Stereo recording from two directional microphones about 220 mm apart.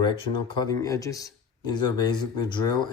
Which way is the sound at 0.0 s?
20° left (ahead or behind).